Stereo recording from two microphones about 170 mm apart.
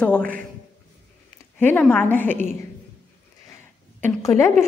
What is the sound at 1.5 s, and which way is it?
Speech, 10° left (ahead or behind).